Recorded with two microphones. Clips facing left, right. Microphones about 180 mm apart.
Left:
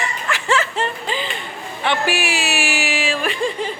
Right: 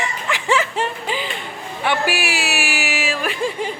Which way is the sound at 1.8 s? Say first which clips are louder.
Even; 10° right (ahead or behind).